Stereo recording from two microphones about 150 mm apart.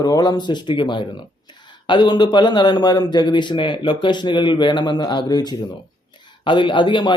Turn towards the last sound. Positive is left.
turn(degrees=30)  # may be behind; listen again after turning